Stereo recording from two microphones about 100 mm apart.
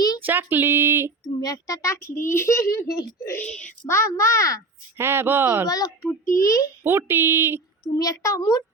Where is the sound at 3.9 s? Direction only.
30° left (ahead or behind).